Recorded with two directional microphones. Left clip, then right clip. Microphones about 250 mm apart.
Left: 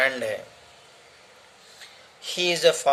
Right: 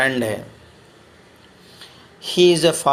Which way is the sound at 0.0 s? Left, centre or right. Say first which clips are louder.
Right 4 dB; centre.